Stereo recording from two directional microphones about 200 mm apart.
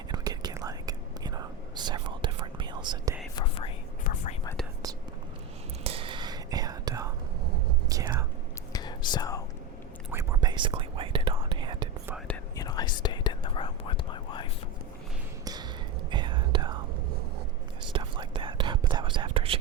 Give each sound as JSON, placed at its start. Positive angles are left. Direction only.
{"t": 0.1, "sound": "whispering", "side_deg": -20}
{"t": 3.3, "sound": "whispering", "side_deg": 25}
{"t": 5.8, "sound": "whispering", "side_deg": -30}
{"t": 8.7, "sound": "whispering", "side_deg": 20}
{"t": 10.1, "sound": "whispering", "side_deg": -10}
{"t": 10.5, "sound": "whispering", "side_deg": -25}
{"t": 12.3, "sound": "whispering", "side_deg": 20}
{"t": 16.0, "sound": "whispering", "side_deg": -25}
{"t": 17.9, "sound": "whispering", "side_deg": -25}